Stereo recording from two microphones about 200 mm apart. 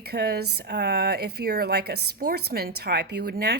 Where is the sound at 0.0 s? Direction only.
55° right (ahead or behind).